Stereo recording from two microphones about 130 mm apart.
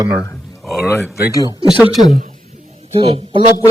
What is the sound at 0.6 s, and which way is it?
Speech, centre (ahead or behind).